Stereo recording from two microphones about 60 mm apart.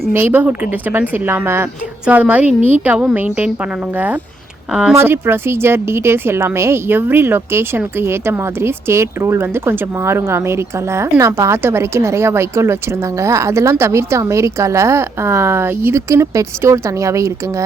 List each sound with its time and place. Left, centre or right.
0.1 s a woman's voice: right
2.0 s speech: right
4.7 s speech: centre
4.9 s a woman's voice: right
16.0 s speech: right